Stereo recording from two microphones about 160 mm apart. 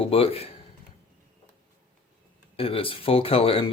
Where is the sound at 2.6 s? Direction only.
35° left (ahead or behind).